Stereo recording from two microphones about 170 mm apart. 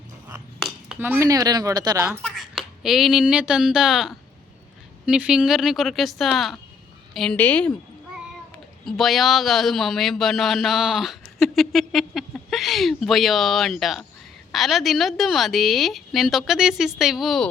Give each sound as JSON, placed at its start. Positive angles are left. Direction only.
{"t": 0.6, "sound": "speech", "side_deg": -5}
{"t": 2.2, "sound": "a woman's voice", "side_deg": 0}
{"t": 8.8, "sound": "a man's voice", "side_deg": 0}